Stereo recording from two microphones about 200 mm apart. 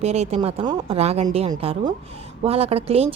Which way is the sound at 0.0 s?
30° right (ahead or behind).